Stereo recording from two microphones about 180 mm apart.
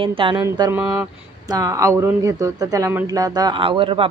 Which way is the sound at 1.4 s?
20° right (ahead or behind).